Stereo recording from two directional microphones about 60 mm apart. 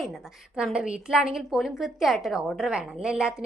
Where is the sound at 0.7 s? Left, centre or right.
Centre.